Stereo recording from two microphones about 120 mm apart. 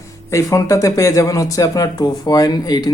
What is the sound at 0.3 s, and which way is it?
Speech, 25° left (ahead or behind).